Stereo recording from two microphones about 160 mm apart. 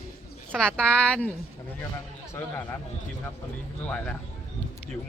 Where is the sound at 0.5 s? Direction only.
5° left (ahead or behind).